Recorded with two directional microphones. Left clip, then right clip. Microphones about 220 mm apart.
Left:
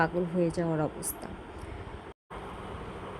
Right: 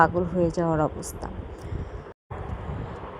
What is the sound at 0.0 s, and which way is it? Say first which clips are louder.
Speech: right 7 dB; 15° right (ahead or behind).